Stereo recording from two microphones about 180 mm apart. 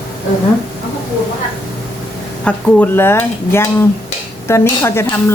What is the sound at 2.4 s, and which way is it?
Speech, 10° left (ahead or behind).